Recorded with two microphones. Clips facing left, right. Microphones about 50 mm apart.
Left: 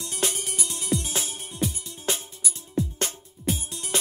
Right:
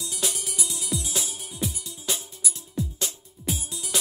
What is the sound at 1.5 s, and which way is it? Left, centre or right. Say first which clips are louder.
Music: left 4 dB; centre.